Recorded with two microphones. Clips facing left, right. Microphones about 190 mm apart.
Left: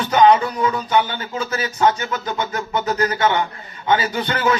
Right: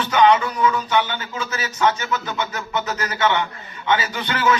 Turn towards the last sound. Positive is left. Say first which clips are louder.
# left 1 dB
turn(degrees=35)  # may be behind; listen again after turning